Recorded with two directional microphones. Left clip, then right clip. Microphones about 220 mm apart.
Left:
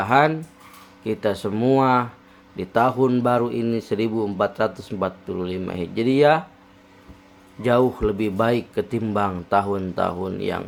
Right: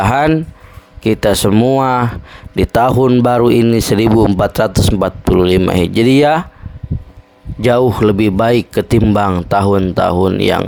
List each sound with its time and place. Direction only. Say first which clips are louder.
0.0 s speech: right 6 dB; 55° right (ahead or behind)
7.6 s speech: right 8 dB; 45° right (ahead or behind)